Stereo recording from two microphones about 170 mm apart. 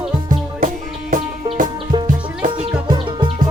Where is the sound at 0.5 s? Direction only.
50° right (ahead or behind).